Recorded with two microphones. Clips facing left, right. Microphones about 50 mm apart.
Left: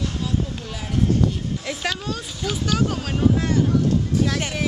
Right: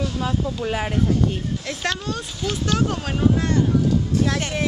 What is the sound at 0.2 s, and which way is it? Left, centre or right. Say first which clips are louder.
Speech: right 3 dB; right.